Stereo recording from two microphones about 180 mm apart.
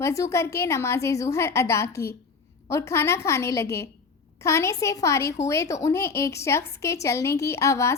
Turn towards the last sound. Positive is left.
turn(degrees=15)  # may be behind; listen again after turning